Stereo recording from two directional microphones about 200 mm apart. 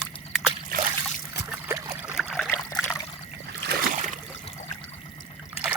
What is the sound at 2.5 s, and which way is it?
Trickle, 15° left (ahead or behind).